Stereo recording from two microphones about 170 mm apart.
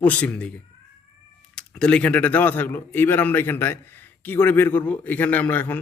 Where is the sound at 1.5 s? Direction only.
5° left (ahead or behind).